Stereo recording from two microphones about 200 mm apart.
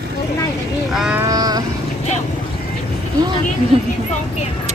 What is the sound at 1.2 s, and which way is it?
Vehicle, 20° right (ahead or behind).